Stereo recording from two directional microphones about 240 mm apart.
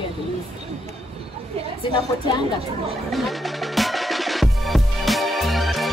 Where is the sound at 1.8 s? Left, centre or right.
Left.